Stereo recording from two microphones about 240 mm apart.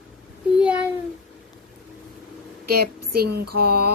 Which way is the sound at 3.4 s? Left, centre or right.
Right.